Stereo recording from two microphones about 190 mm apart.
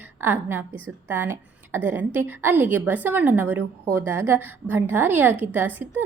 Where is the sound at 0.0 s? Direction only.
10° right (ahead or behind).